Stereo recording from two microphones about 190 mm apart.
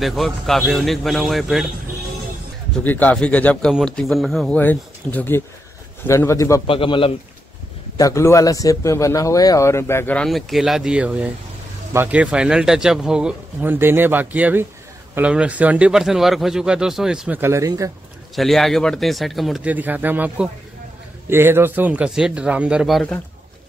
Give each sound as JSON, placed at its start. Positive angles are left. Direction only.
{"t": 0.0, "sound": "speech", "side_deg": 0}
{"t": 2.8, "sound": "a man's voice", "side_deg": 10}
{"t": 6.7, "sound": "a man's voice", "side_deg": 30}
{"t": 8.0, "sound": "a man's voice", "side_deg": 15}
{"t": 18.3, "sound": "speech", "side_deg": 0}